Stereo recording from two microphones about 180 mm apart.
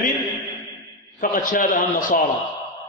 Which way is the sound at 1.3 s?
50° left (ahead or behind).